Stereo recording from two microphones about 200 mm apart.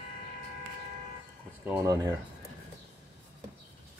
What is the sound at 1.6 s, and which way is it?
Speech, 15° right (ahead or behind).